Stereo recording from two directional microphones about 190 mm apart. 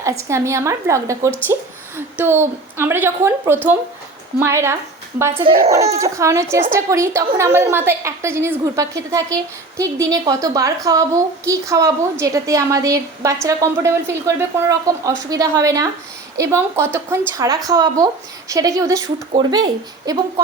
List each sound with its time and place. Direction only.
0.0 s a woman's voice: 15° right (ahead or behind)
6.0 s a woman's voice: 15° right (ahead or behind)